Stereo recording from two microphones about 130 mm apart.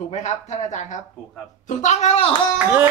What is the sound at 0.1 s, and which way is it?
Speech, 65° left (ahead or behind).